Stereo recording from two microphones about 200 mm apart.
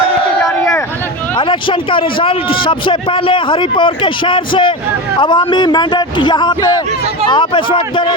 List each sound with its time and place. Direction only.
1.4 s a man's voice: 25° left (ahead or behind)